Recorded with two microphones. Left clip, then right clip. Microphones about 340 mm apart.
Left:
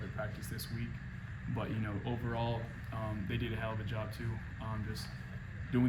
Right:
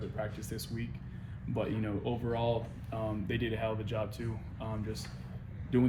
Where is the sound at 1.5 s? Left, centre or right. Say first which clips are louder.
Right 6 dB; centre.